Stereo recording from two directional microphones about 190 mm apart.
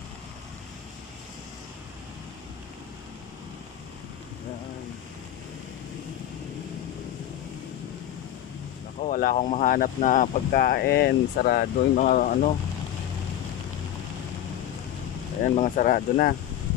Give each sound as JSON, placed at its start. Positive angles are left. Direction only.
{"t": 9.0, "sound": "speech", "side_deg": 45}
{"t": 15.4, "sound": "speech", "side_deg": 40}